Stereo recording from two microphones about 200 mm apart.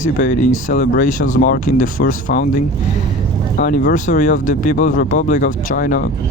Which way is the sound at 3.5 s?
45° left (ahead or behind).